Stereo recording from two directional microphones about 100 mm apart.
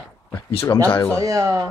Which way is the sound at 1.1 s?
35° right (ahead or behind).